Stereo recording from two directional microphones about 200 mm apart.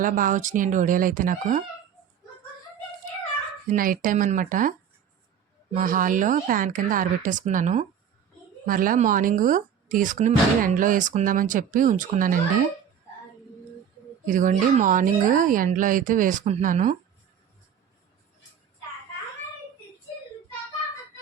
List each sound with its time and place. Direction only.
0.0 s speech: 40° right (ahead or behind)
3.7 s speech: 45° right (ahead or behind)
5.7 s speech: 40° right (ahead or behind)
14.3 s speech: 40° right (ahead or behind)